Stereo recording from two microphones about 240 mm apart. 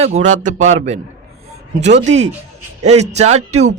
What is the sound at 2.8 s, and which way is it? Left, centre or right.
Speech, right.